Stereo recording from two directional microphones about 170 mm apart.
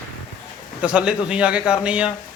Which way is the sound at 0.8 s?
5° right (ahead or behind).